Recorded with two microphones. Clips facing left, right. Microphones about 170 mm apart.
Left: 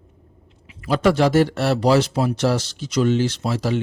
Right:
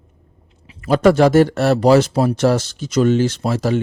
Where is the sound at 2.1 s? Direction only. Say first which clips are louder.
Right 4 dB; 35° right (ahead or behind).